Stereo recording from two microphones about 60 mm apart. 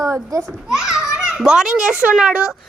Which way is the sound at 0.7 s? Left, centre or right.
Centre.